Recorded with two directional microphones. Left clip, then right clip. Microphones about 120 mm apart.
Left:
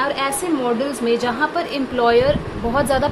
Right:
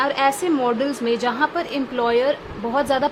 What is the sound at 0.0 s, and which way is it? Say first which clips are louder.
A woman's voice: right 2 dB; 50° right (ahead or behind).